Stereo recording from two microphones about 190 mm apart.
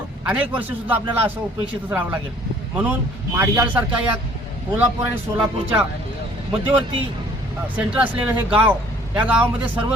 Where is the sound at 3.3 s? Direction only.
15° right (ahead or behind).